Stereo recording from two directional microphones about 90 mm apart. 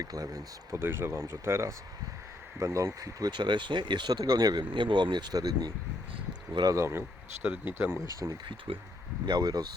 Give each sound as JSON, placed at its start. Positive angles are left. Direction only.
{"t": 0.0, "sound": "speech", "side_deg": -45}
{"t": 0.7, "sound": "speech", "side_deg": -30}
{"t": 4.7, "sound": "speech", "side_deg": -65}
{"t": 6.7, "sound": "speech", "side_deg": -30}
{"t": 8.0, "sound": "speech", "side_deg": -40}
{"t": 8.4, "sound": "speech", "side_deg": -75}
{"t": 9.2, "sound": "speech", "side_deg": -50}